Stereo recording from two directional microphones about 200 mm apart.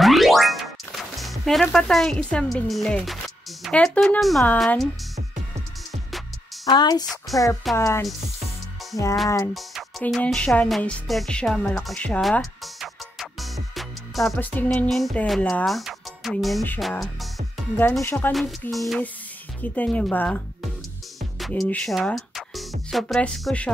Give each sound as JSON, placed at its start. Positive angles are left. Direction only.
{"t": 0.0, "sound": "boing", "side_deg": 0}
{"t": 3.6, "sound": "speech", "side_deg": 5}
{"t": 6.6, "sound": "speech", "side_deg": 20}
{"t": 7.3, "sound": "speech", "side_deg": 0}
{"t": 7.7, "sound": "speech", "side_deg": 15}
{"t": 9.5, "sound": "music", "side_deg": 0}
{"t": 17.7, "sound": "speech", "side_deg": 10}